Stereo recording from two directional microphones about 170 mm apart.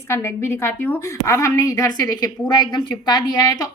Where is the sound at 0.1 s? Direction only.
15° left (ahead or behind).